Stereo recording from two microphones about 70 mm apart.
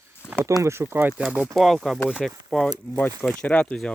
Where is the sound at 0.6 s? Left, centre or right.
Right.